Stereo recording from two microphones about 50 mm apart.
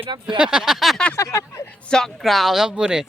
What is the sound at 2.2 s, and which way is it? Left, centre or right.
Speech, centre.